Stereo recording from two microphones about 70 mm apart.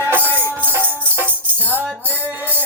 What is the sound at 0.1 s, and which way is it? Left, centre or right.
Music, right.